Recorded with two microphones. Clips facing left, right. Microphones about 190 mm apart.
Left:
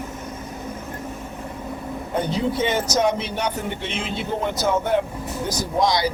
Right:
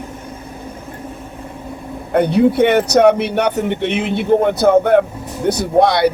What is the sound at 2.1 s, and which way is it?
Speech, 65° right (ahead or behind).